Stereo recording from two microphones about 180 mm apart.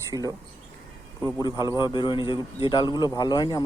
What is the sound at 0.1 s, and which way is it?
Speech, 20° right (ahead or behind).